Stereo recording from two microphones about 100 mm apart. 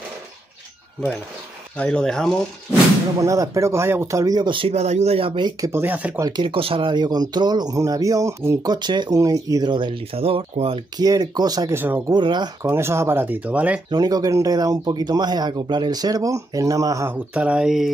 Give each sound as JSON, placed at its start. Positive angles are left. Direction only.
{"t": 1.8, "sound": "speech", "side_deg": 10}
{"t": 3.2, "sound": "speech", "side_deg": -35}
{"t": 4.5, "sound": "speech", "side_deg": -65}
{"t": 5.6, "sound": "speech", "side_deg": -25}
{"t": 6.3, "sound": "speech", "side_deg": -60}
{"t": 8.6, "sound": "speech", "side_deg": -50}
{"t": 9.7, "sound": "speech", "side_deg": -55}
{"t": 11.0, "sound": "speech", "side_deg": -40}
{"t": 11.7, "sound": "speech", "side_deg": -20}
{"t": 12.1, "sound": "speech", "side_deg": -50}
{"t": 12.6, "sound": "speech", "side_deg": -25}
{"t": 13.8, "sound": "speech", "side_deg": -40}
{"t": 17.1, "sound": "speech", "side_deg": -10}